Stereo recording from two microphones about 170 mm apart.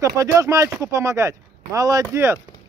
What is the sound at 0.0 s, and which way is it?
Speech, 20° right (ahead or behind).